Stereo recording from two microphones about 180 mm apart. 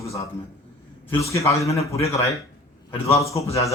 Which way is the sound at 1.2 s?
15° left (ahead or behind).